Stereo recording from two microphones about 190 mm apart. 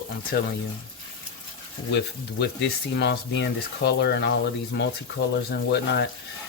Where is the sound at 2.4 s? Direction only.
60° left (ahead or behind).